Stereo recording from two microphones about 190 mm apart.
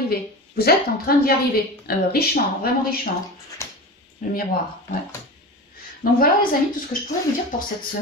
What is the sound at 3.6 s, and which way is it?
Dog, 15° left (ahead or behind).